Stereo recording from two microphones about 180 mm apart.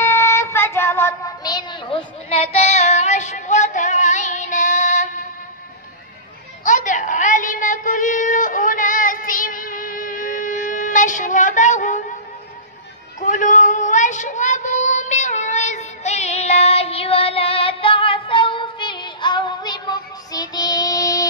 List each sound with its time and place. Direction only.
0.0 s music: 15° left (ahead or behind); by 5.2 s 45° left (ahead or behind)
6.6 s a sound: 45° left (ahead or behind)
13.2 s child singing: 45° left (ahead or behind); by 21.3 s 20° left (ahead or behind)